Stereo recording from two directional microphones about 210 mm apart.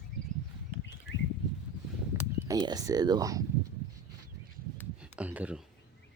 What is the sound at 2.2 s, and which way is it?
Speech, 15° right (ahead or behind).